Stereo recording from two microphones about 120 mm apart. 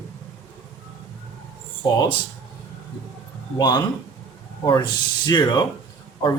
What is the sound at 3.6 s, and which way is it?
Speech, 30° left (ahead or behind).